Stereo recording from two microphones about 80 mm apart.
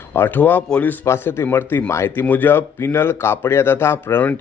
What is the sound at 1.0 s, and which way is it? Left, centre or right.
Speech, left.